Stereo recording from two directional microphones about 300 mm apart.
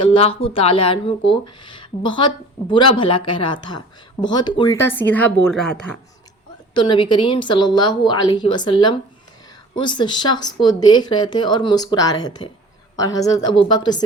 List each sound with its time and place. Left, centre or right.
0.0 s speech: centre
6.7 s speech: centre